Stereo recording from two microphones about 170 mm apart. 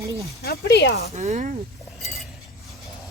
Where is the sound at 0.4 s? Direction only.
65° left (ahead or behind).